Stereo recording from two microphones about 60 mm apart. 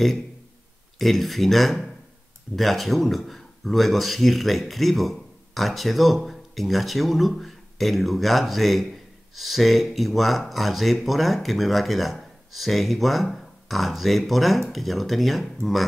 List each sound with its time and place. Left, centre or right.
0.9 s speech: centre